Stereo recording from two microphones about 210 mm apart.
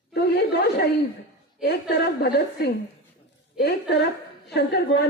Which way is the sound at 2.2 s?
50° left (ahead or behind).